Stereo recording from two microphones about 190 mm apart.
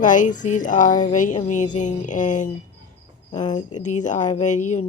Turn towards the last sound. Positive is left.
turn(degrees=40)  # may be behind; listen again after turning